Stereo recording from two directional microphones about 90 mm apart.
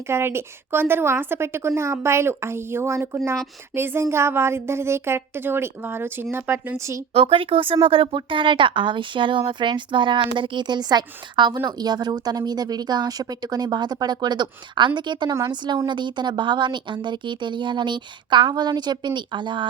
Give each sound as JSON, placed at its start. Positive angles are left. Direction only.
{"t": 0.1, "sound": "a woman's voice", "side_deg": -30}
{"t": 7.1, "sound": "speech", "side_deg": -90}
{"t": 15.3, "sound": "speech", "side_deg": -40}
{"t": 15.9, "sound": "speech", "side_deg": -60}